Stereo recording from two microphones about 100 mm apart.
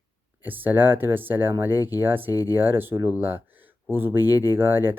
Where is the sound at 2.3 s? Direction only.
40° left (ahead or behind).